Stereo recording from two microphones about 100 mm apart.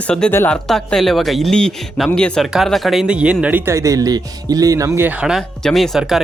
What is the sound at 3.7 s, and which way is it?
Speech, 35° right (ahead or behind).